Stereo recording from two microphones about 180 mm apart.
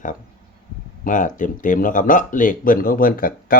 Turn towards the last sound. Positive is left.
turn(degrees=50)  # may be behind; listen again after turning